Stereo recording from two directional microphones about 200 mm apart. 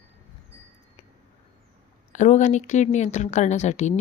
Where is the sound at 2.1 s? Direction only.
35° left (ahead or behind).